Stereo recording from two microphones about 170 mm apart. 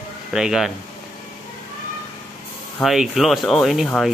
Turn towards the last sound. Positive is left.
turn(degrees=5)  # may be behind; listen again after turning